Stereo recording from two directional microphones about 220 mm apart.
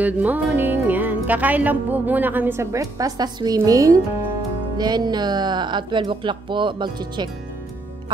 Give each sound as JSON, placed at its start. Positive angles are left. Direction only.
{"t": 0.0, "sound": "music", "side_deg": -5}
{"t": 4.7, "sound": "speech", "side_deg": -20}